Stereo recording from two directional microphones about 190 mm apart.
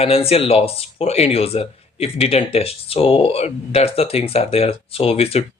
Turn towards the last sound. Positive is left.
turn(degrees=30)  # may be behind; listen again after turning